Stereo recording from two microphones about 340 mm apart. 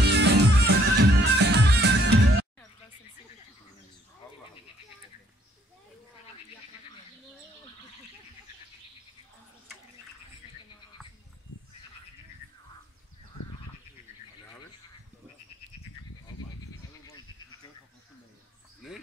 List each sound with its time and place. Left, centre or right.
0.0 s music: right